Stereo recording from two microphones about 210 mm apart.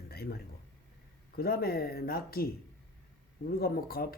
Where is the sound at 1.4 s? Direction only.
45° left (ahead or behind).